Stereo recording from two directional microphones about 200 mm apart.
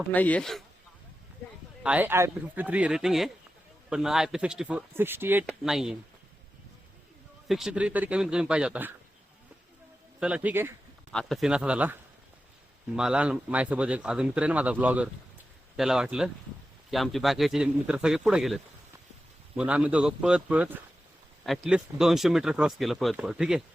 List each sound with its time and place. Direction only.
0.1 s speech: 10° left (ahead or behind)
1.8 s speech: 5° right (ahead or behind)
7.4 s speech: centre (ahead or behind)
10.2 s speech: 5° right (ahead or behind)
11.1 s speech: centre (ahead or behind)
13.0 s speech: 5° right (ahead or behind)